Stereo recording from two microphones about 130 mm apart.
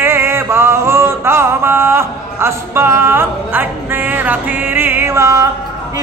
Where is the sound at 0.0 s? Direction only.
20° right (ahead or behind).